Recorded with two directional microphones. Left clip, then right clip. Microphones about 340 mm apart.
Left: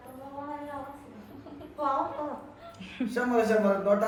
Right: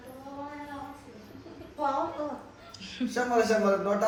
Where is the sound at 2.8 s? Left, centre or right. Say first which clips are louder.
Even; centre.